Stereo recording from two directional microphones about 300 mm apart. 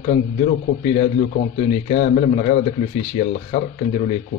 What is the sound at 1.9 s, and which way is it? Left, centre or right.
Speech, left.